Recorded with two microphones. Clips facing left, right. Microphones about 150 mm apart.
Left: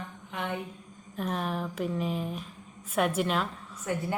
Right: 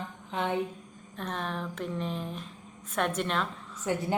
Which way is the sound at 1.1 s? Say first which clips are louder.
Left 3 dB; 5° left (ahead or behind).